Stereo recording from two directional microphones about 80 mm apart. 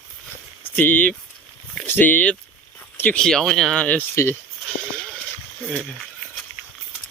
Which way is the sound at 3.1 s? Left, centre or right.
Centre.